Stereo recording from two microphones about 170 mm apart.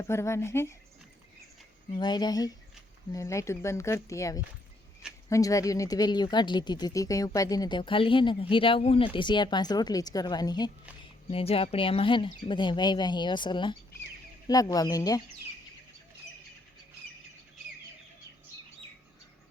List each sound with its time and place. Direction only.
0.0 s speech: 15° left (ahead or behind)
1.9 s speech: 25° left (ahead or behind)
11.3 s speech: 35° left (ahead or behind)